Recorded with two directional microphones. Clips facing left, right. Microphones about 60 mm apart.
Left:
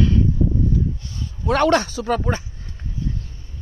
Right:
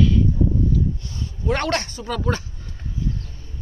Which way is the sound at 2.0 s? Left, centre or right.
Left.